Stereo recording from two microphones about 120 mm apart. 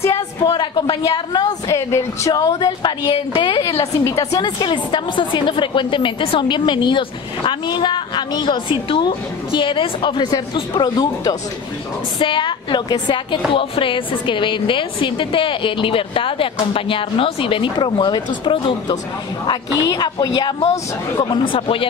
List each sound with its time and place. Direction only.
0.0 s a woman's voice: 30° left (ahead or behind)
1.7 s a woman's voice: 25° left (ahead or behind); by 3.7 s 40° left (ahead or behind)
4.2 s a woman's voice: 30° left (ahead or behind)
4.6 s a woman's voice: 40° left (ahead or behind)